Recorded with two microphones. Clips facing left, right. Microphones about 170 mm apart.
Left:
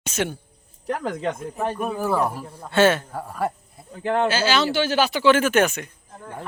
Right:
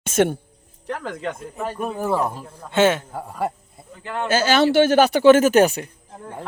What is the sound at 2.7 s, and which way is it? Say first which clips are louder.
Speech: even; 20° right (ahead or behind).